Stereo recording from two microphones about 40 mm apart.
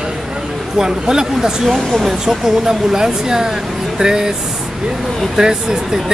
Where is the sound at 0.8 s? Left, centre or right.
Centre.